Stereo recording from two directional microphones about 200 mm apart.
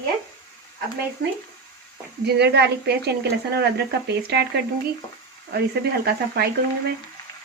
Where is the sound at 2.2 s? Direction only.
55° right (ahead or behind).